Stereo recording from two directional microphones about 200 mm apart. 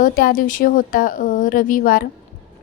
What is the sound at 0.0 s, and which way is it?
A woman's voice, 45° left (ahead or behind).